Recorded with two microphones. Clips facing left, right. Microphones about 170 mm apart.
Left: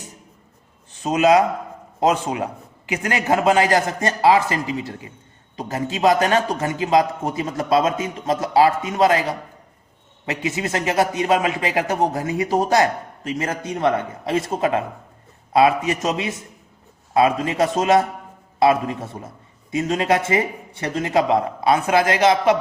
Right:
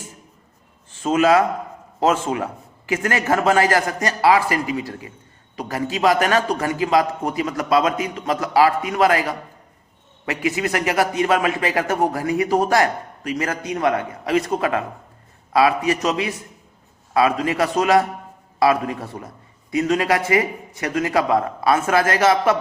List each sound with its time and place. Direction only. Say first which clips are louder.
1.0 s a man's voice: even; 20° left (ahead or behind)